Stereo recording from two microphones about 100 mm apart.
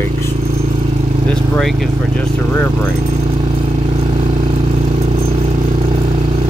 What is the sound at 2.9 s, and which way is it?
Speech, 90° right.